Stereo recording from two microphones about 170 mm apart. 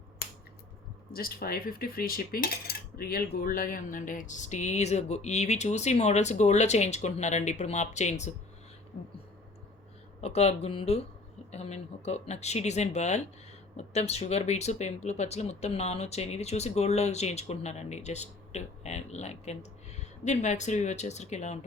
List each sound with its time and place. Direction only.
1.1 s speech: 60° left (ahead or behind); by 8.3 s 40° left (ahead or behind)
10.2 s speech: 40° left (ahead or behind)